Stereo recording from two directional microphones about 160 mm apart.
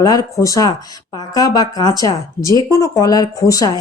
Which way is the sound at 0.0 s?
25° left (ahead or behind).